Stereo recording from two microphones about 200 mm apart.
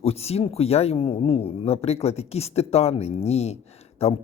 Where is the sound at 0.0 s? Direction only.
30° left (ahead or behind).